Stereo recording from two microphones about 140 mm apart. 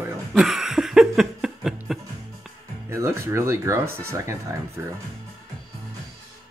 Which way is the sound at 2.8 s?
20° right (ahead or behind).